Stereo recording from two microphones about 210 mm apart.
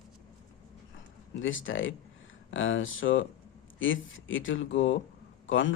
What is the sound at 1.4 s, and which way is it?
Speech, 65° left (ahead or behind).